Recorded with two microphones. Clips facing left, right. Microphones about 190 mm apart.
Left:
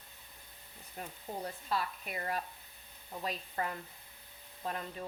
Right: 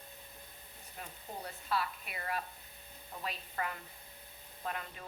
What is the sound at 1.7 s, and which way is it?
A woman's voice, 40° left (ahead or behind).